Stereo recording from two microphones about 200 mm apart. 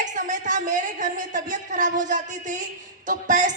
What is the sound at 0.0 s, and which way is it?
A man's voice, 40° right (ahead or behind).